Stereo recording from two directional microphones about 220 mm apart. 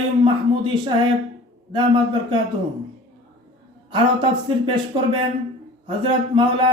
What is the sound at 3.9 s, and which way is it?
Speech, 20° right (ahead or behind).